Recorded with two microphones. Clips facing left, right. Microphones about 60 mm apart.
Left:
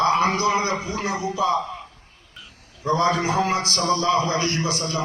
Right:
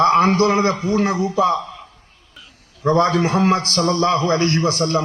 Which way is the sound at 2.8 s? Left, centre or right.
Right.